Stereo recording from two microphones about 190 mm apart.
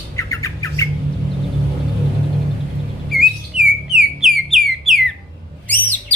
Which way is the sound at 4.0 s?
Centre (ahead or behind).